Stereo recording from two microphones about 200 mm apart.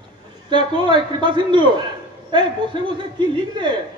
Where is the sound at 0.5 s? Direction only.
25° right (ahead or behind).